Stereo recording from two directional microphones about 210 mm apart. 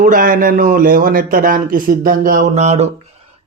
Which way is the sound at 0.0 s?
40° right (ahead or behind).